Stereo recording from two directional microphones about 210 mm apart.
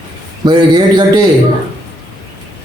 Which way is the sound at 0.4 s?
20° right (ahead or behind).